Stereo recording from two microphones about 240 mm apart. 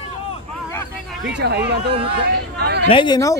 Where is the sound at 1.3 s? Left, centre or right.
Right.